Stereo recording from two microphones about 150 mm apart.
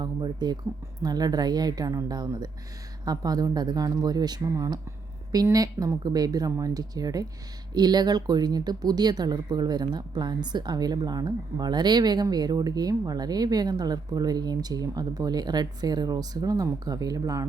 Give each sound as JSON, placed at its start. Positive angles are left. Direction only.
{"t": 0.0, "sound": "speech", "side_deg": -30}